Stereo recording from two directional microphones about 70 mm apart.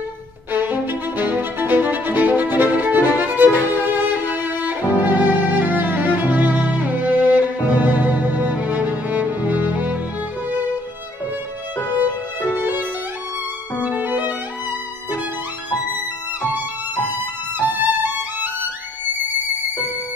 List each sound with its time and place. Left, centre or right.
0.5 s music: right
13.8 s violin: right
17.6 s violin: right